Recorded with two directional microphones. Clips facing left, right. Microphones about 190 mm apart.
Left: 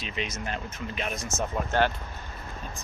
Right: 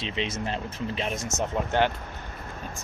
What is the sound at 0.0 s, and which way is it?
Speech, 30° right (ahead or behind).